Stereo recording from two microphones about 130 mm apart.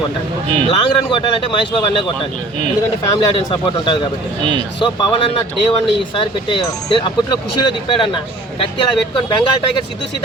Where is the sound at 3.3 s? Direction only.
40° left (ahead or behind).